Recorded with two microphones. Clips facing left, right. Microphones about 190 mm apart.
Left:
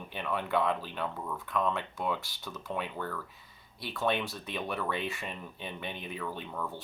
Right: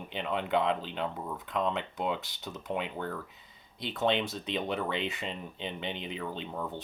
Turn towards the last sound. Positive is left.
turn(degrees=-25)  # may be behind; listen again after turning